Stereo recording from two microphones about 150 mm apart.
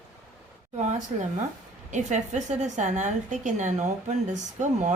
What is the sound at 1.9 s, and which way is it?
A woman's voice, 55° right (ahead or behind).